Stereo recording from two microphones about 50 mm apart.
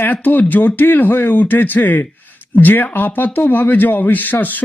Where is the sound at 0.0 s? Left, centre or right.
Left.